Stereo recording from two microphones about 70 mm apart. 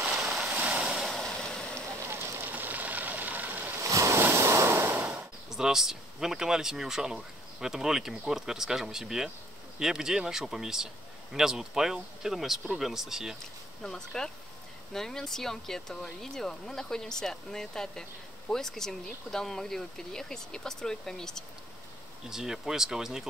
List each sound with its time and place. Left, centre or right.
0.1 s vehicle: centre
0.5 s waves: centre
2.0 s vehicle: right
3.7 s ocean: right
4.2 s waves: right
5.5 s speech: centre
13.8 s speech: centre
22.3 s speech: centre